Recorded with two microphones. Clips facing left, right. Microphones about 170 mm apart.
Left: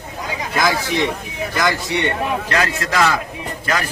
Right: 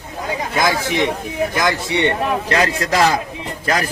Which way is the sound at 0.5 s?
20° right (ahead or behind).